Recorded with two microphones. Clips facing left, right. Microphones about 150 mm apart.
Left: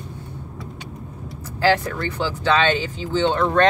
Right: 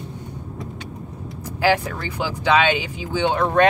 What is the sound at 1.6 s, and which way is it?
Speech, 10° right (ahead or behind).